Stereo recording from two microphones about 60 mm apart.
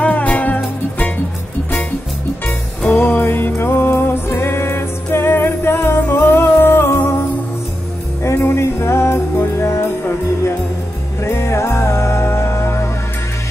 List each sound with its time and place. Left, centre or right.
0.0 s music: left
2.9 s music: left
8.2 s music: left
11.2 s music: left